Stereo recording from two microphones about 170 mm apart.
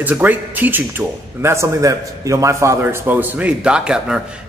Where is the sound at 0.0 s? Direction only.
10° right (ahead or behind).